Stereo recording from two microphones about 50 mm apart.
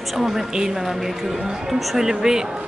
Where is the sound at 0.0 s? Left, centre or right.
Centre.